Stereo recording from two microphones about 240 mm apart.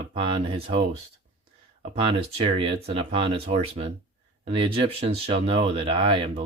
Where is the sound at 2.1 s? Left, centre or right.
Right.